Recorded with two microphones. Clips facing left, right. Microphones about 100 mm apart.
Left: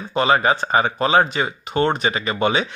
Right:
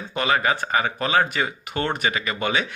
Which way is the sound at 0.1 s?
30° left (ahead or behind).